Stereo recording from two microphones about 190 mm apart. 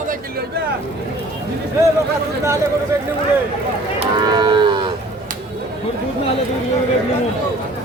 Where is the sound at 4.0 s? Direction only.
25° right (ahead or behind).